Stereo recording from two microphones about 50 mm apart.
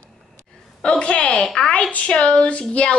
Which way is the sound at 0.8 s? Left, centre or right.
Left.